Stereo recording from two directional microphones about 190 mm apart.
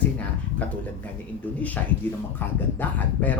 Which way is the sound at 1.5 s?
10° left (ahead or behind).